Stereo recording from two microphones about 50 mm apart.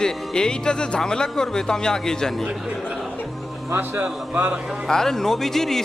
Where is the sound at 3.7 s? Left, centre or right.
Right.